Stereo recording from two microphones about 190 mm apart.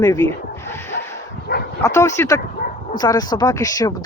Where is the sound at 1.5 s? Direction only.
55° left (ahead or behind).